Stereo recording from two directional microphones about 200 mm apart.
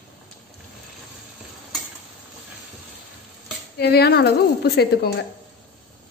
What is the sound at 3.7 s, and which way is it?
Speech, 55° left (ahead or behind).